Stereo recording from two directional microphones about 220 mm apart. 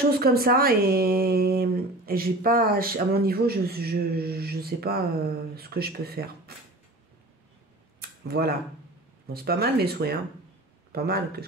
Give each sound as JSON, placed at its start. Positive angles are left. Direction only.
{"t": 0.1, "sound": "speech", "side_deg": -45}
{"t": 8.3, "sound": "speech", "side_deg": -45}